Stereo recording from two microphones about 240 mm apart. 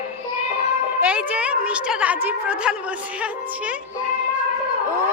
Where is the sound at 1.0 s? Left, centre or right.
Centre.